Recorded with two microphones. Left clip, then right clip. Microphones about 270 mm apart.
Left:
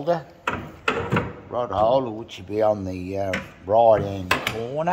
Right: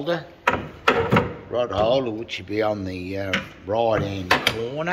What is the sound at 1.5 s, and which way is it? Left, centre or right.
Speech, left.